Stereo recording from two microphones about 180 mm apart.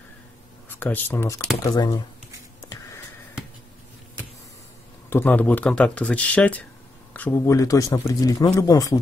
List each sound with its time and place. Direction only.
0.7 s speech: 10° left (ahead or behind)
5.1 s speech: 10° left (ahead or behind)